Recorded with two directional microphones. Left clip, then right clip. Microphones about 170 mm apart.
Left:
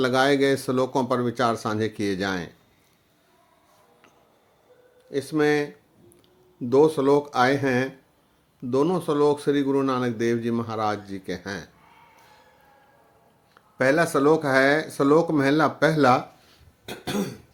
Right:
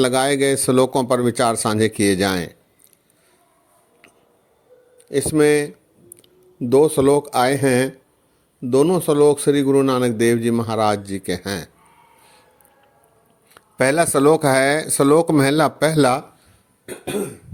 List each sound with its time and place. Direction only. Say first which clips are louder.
0.0 s a man's voice: right 3 dB; 50° right (ahead or behind)
5.1 s a man's voice: right 6 dB; 45° right (ahead or behind)
13.5 s speech: right 3 dB; 60° right (ahead or behind)